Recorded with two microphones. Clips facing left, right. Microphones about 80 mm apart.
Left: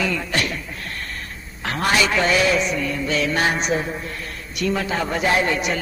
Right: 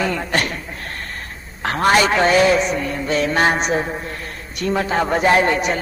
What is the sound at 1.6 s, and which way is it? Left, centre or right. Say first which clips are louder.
A man's voice: right 5 dB; right.